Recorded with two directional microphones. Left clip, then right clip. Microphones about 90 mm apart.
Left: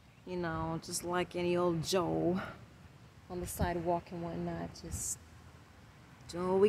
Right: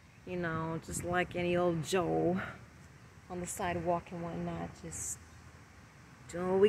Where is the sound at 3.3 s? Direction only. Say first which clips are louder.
Right 1 dB; 35° left (ahead or behind).